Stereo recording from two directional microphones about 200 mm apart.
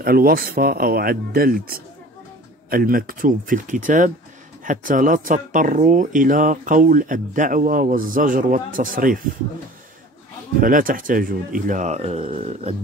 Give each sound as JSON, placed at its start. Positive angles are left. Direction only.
{"t": 0.0, "sound": "speech", "side_deg": -50}
{"t": 10.6, "sound": "speech", "side_deg": -45}